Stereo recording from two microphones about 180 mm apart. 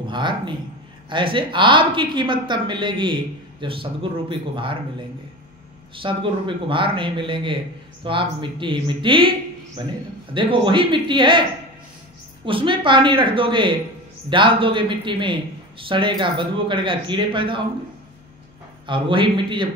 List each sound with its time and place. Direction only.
0.0 s speech: 25° right (ahead or behind)
6.0 s speech: 30° right (ahead or behind)
10.3 s speech: 25° right (ahead or behind)
12.4 s speech: 30° right (ahead or behind)
18.9 s speech: 25° right (ahead or behind)